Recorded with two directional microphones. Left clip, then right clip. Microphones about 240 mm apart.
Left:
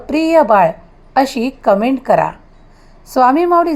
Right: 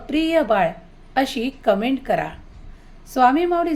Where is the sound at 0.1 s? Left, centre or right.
Left.